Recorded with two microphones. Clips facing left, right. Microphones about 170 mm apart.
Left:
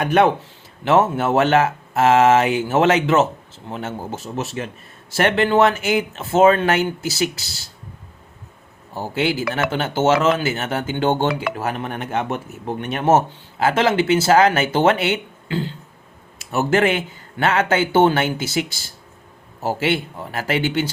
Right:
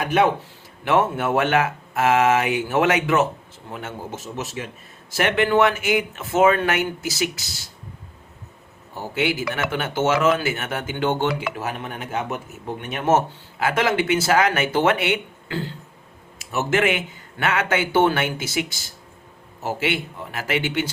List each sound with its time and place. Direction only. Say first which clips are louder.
0.9 s speech: left 3 dB; 30° left (ahead or behind)
9.1 s speech: left 2 dB; 30° left (ahead or behind)
16.5 s speech: left 3 dB; 35° left (ahead or behind)